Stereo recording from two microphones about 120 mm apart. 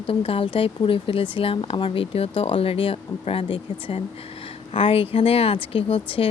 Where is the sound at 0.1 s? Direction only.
50° left (ahead or behind).